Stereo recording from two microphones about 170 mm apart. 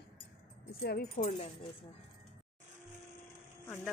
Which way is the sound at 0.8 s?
60° left (ahead or behind).